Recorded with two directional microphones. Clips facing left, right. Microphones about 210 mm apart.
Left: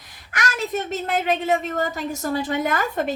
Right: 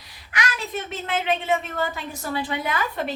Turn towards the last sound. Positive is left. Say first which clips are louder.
# left 4 dB
turn(degrees=45)  # may be behind; listen again after turning